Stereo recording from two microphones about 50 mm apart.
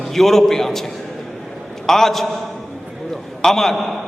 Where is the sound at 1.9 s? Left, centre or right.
Centre.